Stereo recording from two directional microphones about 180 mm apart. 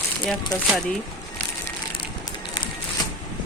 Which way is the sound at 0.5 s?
20° left (ahead or behind).